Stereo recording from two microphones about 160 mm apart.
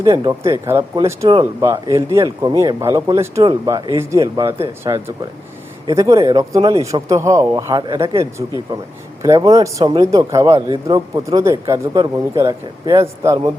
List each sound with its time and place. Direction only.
0.0 s speech: 25° right (ahead or behind)
8.2 s speech: 20° right (ahead or behind)